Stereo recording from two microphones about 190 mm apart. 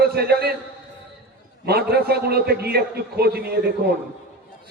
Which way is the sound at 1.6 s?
55° right (ahead or behind).